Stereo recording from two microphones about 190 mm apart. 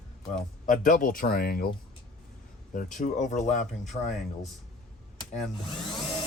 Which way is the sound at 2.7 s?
45° left (ahead or behind).